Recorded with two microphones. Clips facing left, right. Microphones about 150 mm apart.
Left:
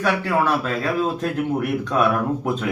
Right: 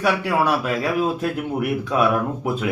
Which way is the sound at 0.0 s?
10° right (ahead or behind).